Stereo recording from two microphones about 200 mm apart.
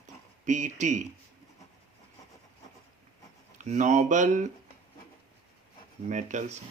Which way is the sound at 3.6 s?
35° right (ahead or behind).